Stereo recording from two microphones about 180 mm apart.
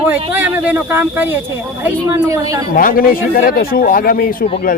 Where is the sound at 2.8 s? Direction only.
50° left (ahead or behind).